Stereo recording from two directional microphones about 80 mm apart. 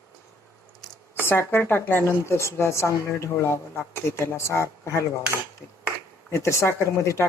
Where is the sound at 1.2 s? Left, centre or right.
Left.